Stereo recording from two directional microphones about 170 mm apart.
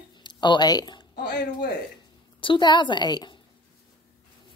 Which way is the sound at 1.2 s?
90° left.